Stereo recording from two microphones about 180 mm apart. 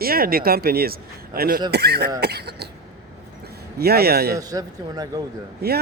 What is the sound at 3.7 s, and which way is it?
Speech, 60° right (ahead or behind).